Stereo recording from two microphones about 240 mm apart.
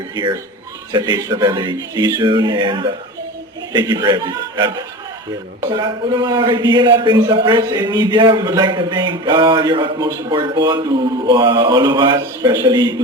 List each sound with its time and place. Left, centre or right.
0.9 s a man's voice: centre